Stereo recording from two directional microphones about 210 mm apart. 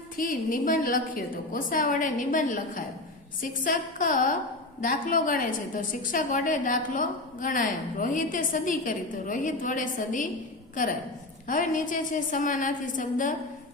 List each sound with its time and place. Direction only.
0.2 s a woman's voice: 40° left (ahead or behind)
11.4 s a woman's voice: 40° left (ahead or behind)